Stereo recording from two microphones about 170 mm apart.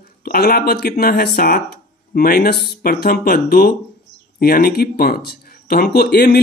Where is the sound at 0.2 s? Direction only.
60° left (ahead or behind).